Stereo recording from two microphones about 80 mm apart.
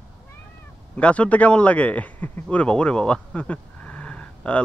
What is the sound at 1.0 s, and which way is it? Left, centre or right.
A man's voice, centre.